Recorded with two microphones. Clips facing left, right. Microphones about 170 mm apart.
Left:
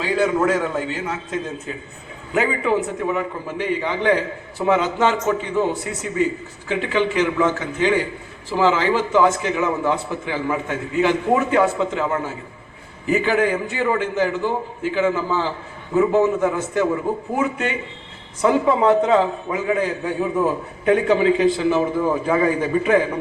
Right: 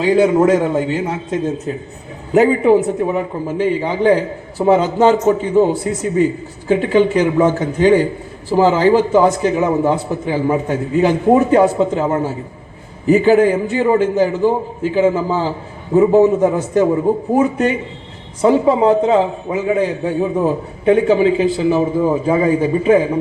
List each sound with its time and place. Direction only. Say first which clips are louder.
0.0 s a man's voice: right 7 dB; 30° right (ahead or behind)
2.3 s a man's voice: right 9 dB; 40° right (ahead or behind)
18.7 s a man's voice: right 3 dB; 25° right (ahead or behind)